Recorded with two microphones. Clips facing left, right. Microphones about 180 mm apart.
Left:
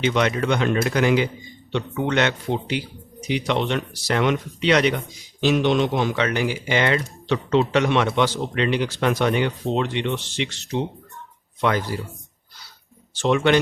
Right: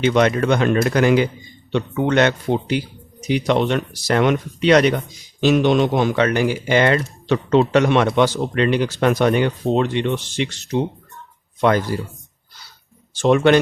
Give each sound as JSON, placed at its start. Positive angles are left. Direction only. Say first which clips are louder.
{"t": 0.0, "sound": "speech", "louder": "right 5 dB", "side_deg": -45}
{"t": 11.6, "sound": "speech", "louder": "right 5 dB", "side_deg": -45}
{"t": 13.1, "sound": "speech", "louder": "right 4 dB", "side_deg": -45}